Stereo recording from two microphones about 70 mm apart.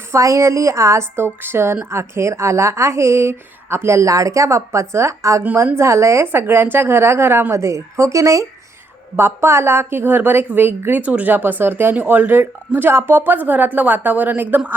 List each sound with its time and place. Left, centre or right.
0.1 s a woman's voice: right
9.1 s a woman's voice: right
11.0 s a woman's voice: right